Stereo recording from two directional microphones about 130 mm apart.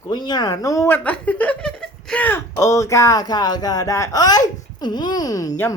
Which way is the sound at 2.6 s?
25° left (ahead or behind).